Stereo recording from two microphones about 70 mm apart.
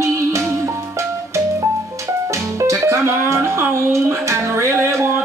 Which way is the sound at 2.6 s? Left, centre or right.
Right.